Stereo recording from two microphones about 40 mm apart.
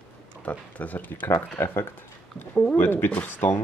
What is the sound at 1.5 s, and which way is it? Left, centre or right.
Speech, left.